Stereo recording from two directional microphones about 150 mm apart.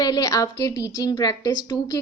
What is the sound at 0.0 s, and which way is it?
A woman's voice, 25° left (ahead or behind).